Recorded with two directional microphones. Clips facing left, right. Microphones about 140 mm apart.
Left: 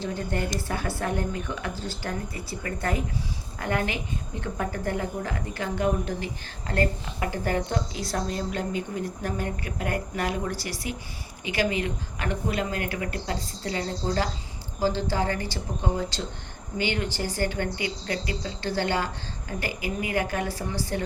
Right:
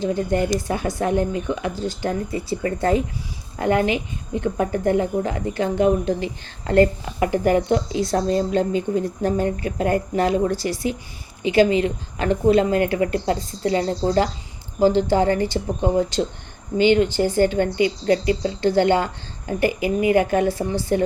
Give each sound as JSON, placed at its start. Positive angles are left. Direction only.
{"t": 0.0, "sound": "a woman's voice", "side_deg": -15}